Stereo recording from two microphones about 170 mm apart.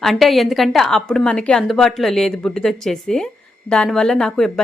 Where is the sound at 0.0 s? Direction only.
Centre (ahead or behind).